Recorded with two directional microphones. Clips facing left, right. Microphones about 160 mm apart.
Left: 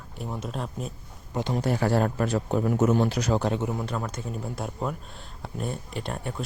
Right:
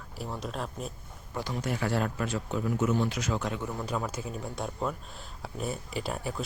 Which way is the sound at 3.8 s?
5° right (ahead or behind).